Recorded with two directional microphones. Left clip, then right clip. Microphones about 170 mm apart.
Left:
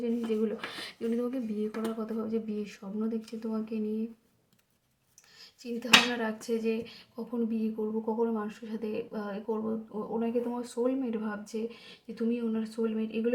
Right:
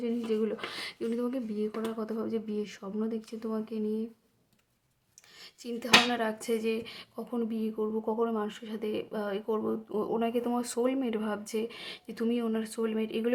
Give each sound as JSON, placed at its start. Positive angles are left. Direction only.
{"t": 0.0, "sound": "a sound", "side_deg": -20}
{"t": 2.0, "sound": "speech", "side_deg": -25}
{"t": 5.4, "sound": "speech", "side_deg": -30}